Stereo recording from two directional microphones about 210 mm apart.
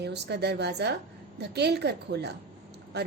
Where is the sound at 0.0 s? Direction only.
55° right (ahead or behind).